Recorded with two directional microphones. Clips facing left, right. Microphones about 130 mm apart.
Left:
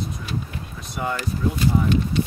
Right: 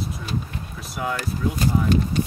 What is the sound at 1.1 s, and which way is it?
Speech, 40° right (ahead or behind).